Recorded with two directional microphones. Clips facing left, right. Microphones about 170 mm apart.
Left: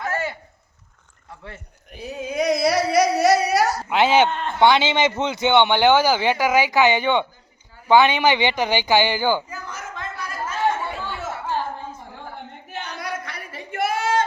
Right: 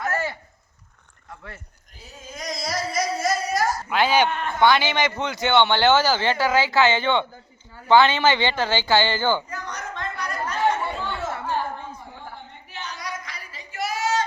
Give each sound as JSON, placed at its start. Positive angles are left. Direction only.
{"t": 2.0, "sound": "speech", "side_deg": 70}
{"t": 3.9, "sound": "a man's voice", "side_deg": 20}
{"t": 7.9, "sound": "a sound", "side_deg": 15}
{"t": 12.4, "sound": "singing", "side_deg": 60}